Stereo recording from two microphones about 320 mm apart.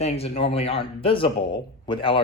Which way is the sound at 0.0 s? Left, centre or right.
Centre.